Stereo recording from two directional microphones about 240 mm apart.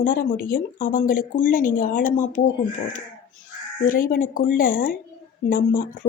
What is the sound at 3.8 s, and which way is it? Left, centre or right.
Speech, left.